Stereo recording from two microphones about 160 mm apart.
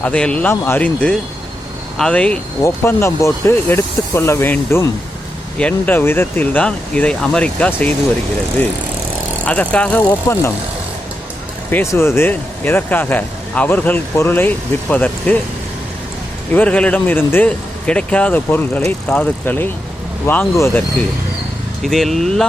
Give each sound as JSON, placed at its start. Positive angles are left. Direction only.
{"t": 0.0, "sound": "speech", "side_deg": 5}
{"t": 2.6, "sound": "speech", "side_deg": 15}
{"t": 9.4, "sound": "speech", "side_deg": 10}
{"t": 11.7, "sound": "speech", "side_deg": 15}
{"t": 16.5, "sound": "speech", "side_deg": 10}